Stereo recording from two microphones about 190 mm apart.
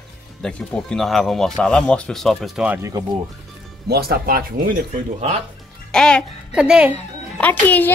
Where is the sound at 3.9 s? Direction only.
55° right (ahead or behind).